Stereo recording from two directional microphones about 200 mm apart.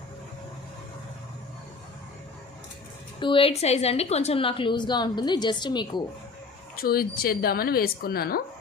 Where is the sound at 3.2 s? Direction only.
25° left (ahead or behind).